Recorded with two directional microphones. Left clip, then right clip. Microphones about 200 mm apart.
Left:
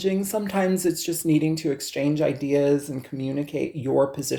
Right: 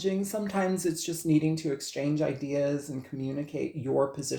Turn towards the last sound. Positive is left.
turn(degrees=40)  # may be behind; listen again after turning